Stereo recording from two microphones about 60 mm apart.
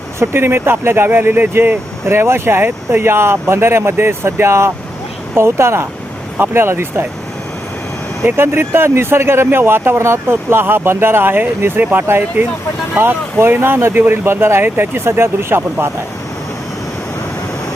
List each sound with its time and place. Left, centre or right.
0.2 s speech: right
8.4 s speech: right